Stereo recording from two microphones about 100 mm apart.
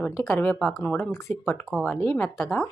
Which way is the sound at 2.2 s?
25° left (ahead or behind).